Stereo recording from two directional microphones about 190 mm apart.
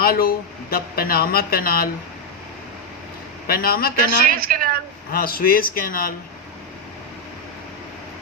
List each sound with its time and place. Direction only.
0.0 s speech: 50° left (ahead or behind)
3.4 s speech: 50° left (ahead or behind)
4.4 s a sound: 50° right (ahead or behind)
5.1 s speech: 50° left (ahead or behind)